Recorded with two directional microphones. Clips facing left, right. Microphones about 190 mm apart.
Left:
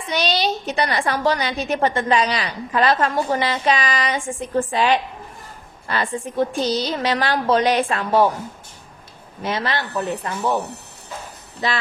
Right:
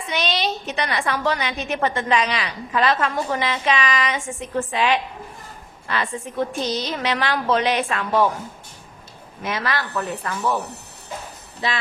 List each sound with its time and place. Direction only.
0.1 s a woman's voice: 35° left (ahead or behind)
6.5 s a woman's voice: 35° left (ahead or behind)
9.4 s speech: 30° left (ahead or behind)